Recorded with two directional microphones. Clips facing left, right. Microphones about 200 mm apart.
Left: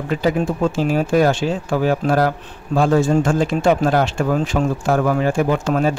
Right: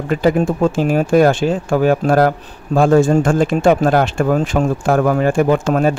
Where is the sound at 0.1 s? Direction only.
50° right (ahead or behind).